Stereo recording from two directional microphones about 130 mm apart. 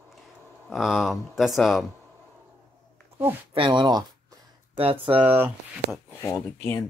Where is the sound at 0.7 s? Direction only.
Centre (ahead or behind).